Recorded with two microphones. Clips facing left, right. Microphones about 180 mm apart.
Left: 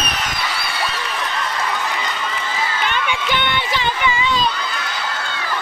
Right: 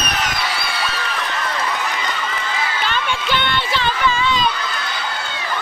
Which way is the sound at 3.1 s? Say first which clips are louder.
Even; 15° left (ahead or behind).